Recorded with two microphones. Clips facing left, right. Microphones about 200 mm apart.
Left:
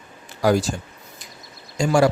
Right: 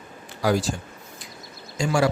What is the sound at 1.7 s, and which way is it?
Speech, 45° left (ahead or behind).